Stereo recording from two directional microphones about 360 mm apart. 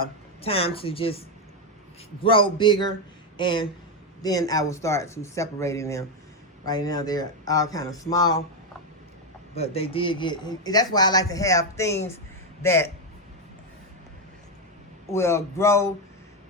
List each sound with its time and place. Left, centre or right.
0.0 s a man's voice: centre
2.2 s a man's voice: centre
9.6 s a man's voice: centre
15.1 s a man's voice: centre